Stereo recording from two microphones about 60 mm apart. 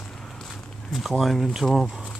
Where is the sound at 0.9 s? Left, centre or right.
Centre.